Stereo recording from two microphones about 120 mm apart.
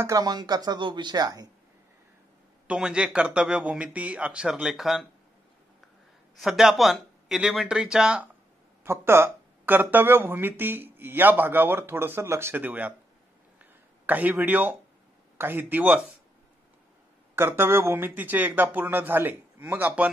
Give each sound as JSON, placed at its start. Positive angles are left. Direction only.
{"t": 0.0, "sound": "speech", "side_deg": -30}
{"t": 2.7, "sound": "speech", "side_deg": -10}
{"t": 6.4, "sound": "speech", "side_deg": -5}
{"t": 8.8, "sound": "speech", "side_deg": -20}
{"t": 14.0, "sound": "speech", "side_deg": -15}
{"t": 17.4, "sound": "speech", "side_deg": -20}